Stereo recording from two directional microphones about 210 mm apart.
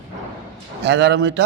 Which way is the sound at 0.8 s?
55° right (ahead or behind).